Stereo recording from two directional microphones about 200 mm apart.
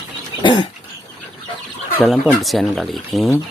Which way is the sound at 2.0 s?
Centre (ahead or behind).